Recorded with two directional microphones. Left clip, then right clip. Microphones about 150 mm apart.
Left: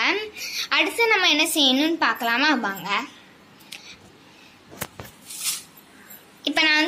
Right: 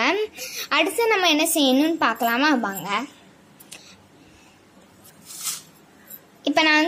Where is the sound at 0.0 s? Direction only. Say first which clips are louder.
Right 1 dB; 65° right (ahead or behind).